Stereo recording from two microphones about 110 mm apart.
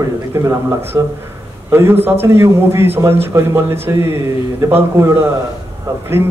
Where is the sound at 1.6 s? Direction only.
20° right (ahead or behind).